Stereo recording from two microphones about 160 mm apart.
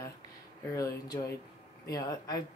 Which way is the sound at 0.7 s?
20° left (ahead or behind).